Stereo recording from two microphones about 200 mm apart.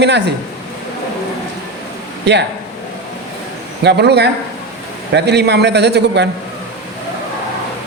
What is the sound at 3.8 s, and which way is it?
A man's voice, 55° right (ahead or behind).